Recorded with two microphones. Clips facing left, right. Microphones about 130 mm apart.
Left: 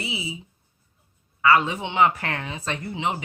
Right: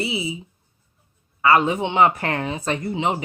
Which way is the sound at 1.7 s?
45° right (ahead or behind).